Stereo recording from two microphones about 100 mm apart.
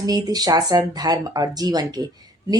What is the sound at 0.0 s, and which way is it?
A woman's voice, 40° right (ahead or behind).